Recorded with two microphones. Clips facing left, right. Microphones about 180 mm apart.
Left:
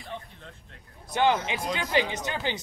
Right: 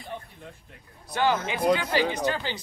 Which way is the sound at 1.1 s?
20° left (ahead or behind).